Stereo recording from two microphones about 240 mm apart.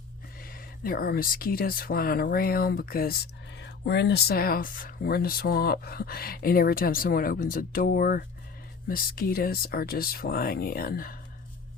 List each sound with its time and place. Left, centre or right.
0.4 s speech: left